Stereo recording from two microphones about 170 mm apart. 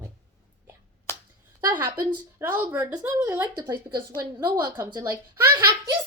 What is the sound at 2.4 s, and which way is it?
Speech, 15° right (ahead or behind).